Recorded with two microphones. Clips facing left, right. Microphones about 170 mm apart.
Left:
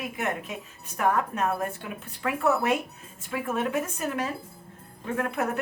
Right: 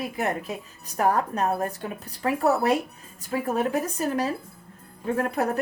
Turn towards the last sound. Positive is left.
turn(degrees=-35)  # may be behind; listen again after turning